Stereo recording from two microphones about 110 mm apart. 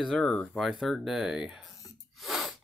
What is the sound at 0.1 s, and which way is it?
Speech, 10° left (ahead or behind).